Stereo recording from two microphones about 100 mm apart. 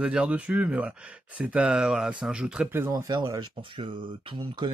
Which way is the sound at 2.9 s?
45° right (ahead or behind).